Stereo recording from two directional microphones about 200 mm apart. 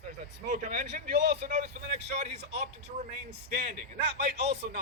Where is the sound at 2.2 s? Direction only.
35° right (ahead or behind).